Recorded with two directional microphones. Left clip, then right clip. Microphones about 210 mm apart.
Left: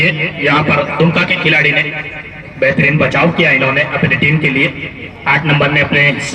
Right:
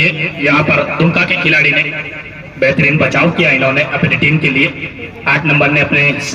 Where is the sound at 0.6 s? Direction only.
5° right (ahead or behind).